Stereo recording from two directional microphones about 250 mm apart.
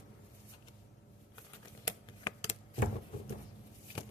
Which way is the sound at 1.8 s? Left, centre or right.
Centre.